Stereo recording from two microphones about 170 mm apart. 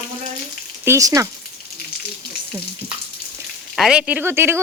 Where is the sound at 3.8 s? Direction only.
5° right (ahead or behind).